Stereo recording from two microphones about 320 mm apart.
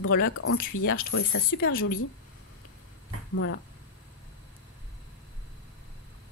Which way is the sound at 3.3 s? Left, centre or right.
Left.